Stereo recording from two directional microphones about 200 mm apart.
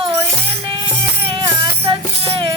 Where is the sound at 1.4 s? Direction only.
25° right (ahead or behind).